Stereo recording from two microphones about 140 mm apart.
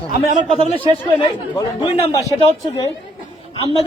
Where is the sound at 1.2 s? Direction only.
30° left (ahead or behind).